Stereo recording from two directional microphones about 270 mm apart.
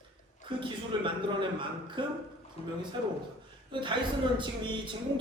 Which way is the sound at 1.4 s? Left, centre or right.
Centre.